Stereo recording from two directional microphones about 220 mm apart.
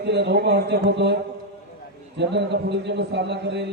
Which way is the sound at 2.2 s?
50° right (ahead or behind).